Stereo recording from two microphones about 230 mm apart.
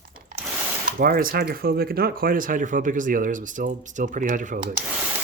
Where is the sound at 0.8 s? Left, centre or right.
Right.